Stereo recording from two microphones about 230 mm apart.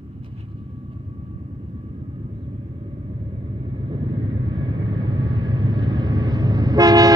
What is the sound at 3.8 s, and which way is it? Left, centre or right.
Vehicle, right.